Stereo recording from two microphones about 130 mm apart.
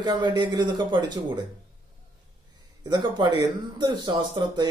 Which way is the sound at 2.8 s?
35° right (ahead or behind).